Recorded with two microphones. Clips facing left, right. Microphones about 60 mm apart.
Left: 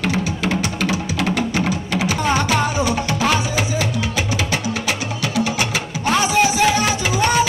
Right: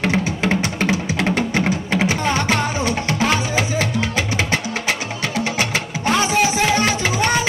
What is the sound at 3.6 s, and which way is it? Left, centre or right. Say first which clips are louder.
Music: right 1 dB; right.